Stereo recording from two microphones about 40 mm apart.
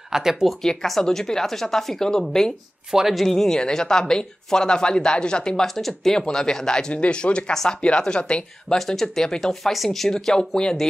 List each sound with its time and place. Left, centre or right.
0.1 s speech: centre
0.8 s speech: centre
2.9 s speech: centre
3.2 s speech: centre
5.8 s speech: centre
6.1 s speech: centre
6.9 s speech: left
8.7 s speech: centre